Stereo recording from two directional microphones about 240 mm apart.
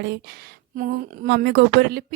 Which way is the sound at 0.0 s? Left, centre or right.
Right.